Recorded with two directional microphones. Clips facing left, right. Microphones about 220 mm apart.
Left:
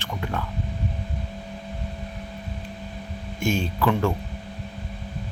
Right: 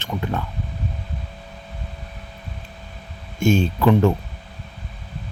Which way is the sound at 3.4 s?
25° right (ahead or behind).